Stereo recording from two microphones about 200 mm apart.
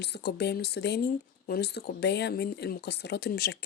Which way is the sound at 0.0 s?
55° left (ahead or behind).